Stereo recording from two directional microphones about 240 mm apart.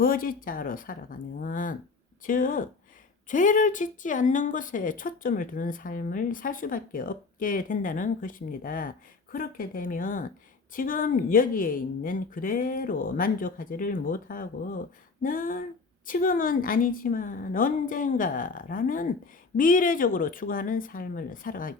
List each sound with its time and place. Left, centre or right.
0.0 s a woman's voice: left